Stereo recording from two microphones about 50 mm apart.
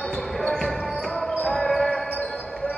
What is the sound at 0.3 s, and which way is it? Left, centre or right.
Basketball bounce, centre.